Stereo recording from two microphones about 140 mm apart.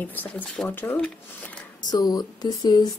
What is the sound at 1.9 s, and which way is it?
Speech, 30° left (ahead or behind).